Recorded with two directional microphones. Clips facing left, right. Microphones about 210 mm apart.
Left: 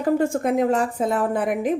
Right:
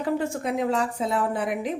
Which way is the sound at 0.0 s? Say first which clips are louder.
Left 6 dB; 50° left (ahead or behind).